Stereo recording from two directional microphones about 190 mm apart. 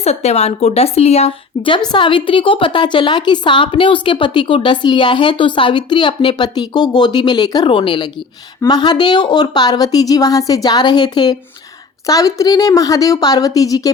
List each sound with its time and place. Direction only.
0.0 s a woman's voice: 35° left (ahead or behind); by 13.9 s 20° left (ahead or behind)